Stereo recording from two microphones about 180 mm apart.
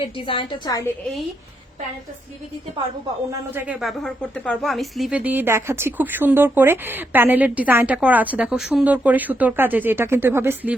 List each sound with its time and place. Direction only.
0.0 s a woman's voice: 30° left (ahead or behind)
3.5 s speech: 5° right (ahead or behind)